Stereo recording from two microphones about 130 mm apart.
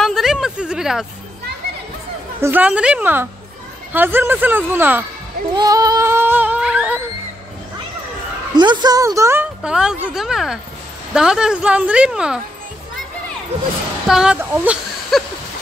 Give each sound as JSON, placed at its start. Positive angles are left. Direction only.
{"t": 0.0, "sound": "a sound", "side_deg": 0}
{"t": 2.4, "sound": "a woman's voice", "side_deg": -10}
{"t": 5.6, "sound": "music", "side_deg": -30}
{"t": 8.5, "sound": "a woman's voice", "side_deg": -35}
{"t": 9.6, "sound": "a woman's voice", "side_deg": -5}
{"t": 14.0, "sound": "a woman's voice", "side_deg": -5}
{"t": 15.1, "sound": "speech", "side_deg": 0}